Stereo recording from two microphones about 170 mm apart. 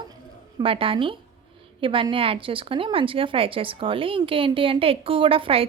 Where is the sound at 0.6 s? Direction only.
30° right (ahead or behind).